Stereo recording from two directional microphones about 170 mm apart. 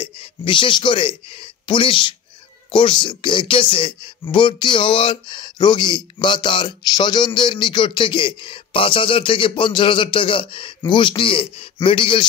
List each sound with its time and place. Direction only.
0.0 s speech: 30° left (ahead or behind)